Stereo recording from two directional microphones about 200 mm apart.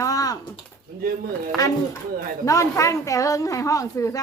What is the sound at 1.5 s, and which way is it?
Speech, centre (ahead or behind).